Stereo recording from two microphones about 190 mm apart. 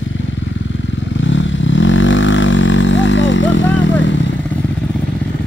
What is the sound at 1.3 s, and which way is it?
Vehicle, 80° left.